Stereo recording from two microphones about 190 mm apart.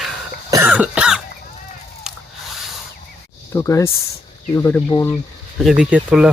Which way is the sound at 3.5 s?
15° left (ahead or behind).